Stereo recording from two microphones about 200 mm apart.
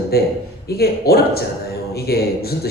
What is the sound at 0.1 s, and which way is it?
A woman's voice, 50° left (ahead or behind).